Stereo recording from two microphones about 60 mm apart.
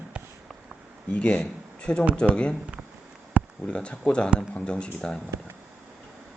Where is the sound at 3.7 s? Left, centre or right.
Centre.